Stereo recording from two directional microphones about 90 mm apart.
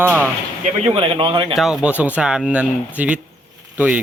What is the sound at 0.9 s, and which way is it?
Speech, 85° right.